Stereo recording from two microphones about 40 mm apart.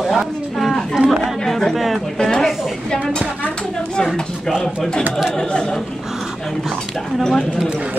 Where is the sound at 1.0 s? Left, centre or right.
Right.